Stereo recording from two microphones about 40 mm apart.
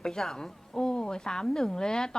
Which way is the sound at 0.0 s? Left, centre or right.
Centre.